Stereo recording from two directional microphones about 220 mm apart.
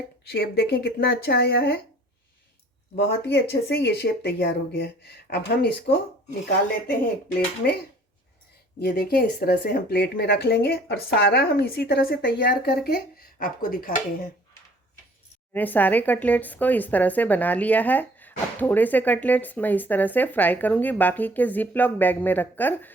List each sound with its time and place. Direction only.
0.3 s speech: 45° left (ahead or behind)
2.9 s speech: 50° left (ahead or behind)
7.6 s speech: 45° left (ahead or behind)
8.8 s speech: 45° left (ahead or behind)
15.5 s speech: 10° left (ahead or behind)